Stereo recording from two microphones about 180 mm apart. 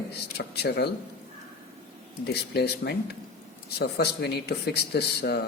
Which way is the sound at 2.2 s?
65° left (ahead or behind).